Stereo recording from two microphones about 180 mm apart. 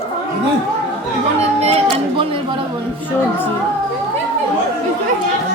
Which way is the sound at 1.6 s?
35° right (ahead or behind).